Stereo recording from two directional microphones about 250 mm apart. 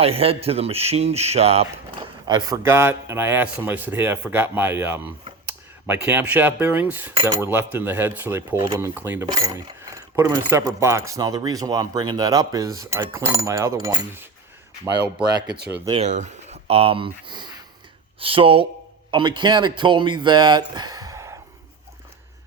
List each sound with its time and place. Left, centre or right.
0.0 s a man's voice: right
15.5 s speech: right
15.9 s speech: right